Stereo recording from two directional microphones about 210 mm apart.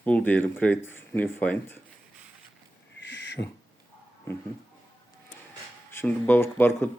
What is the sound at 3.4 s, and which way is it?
Speech, 20° left (ahead or behind).